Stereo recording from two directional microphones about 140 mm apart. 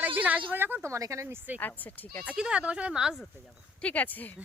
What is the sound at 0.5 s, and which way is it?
Speech, 15° right (ahead or behind).